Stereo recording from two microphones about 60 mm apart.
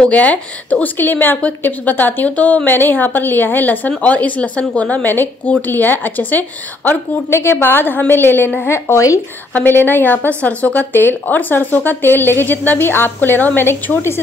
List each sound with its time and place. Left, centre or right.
0.0 s a woman's voice: left
5.0 s a woman's voice: left
7.2 s a woman's voice: left
9.7 s a woman's voice: left
10.9 s a woman's voice: left